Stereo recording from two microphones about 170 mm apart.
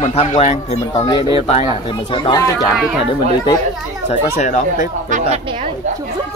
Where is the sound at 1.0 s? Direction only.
30° left (ahead or behind).